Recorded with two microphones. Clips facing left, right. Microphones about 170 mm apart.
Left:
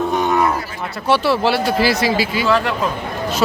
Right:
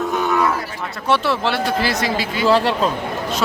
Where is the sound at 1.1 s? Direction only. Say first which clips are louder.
Left 3 dB; 5° left (ahead or behind).